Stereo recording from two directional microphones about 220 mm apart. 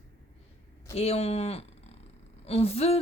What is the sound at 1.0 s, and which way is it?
Speech, 30° left (ahead or behind).